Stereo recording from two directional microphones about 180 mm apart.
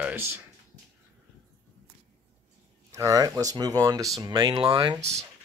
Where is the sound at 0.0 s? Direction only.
10° right (ahead or behind).